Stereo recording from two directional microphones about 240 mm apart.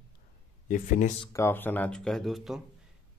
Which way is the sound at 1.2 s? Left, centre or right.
Centre.